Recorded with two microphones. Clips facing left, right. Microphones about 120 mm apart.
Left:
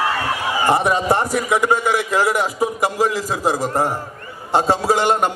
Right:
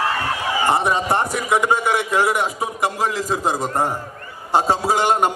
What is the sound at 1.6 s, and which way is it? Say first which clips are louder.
Speech: left 1 dB; 20° right (ahead or behind).